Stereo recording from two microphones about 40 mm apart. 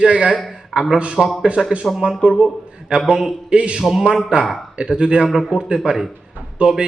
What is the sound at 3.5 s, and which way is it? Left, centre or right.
Speech, right.